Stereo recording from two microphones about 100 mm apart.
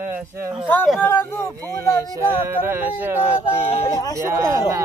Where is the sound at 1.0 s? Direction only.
20° left (ahead or behind).